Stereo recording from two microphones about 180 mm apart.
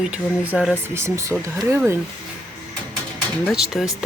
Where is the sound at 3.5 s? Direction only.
Centre (ahead or behind).